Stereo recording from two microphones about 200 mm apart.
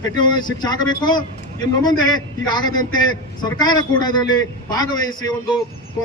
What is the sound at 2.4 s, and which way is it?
A man's voice, 20° left (ahead or behind).